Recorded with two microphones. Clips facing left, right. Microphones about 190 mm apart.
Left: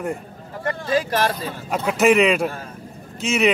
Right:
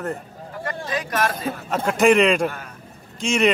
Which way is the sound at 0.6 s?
30° left (ahead or behind).